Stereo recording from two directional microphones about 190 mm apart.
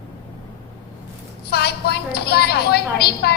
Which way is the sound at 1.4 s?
60° left (ahead or behind).